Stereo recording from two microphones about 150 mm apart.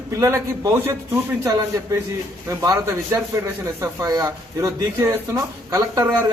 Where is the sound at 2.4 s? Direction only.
20° right (ahead or behind).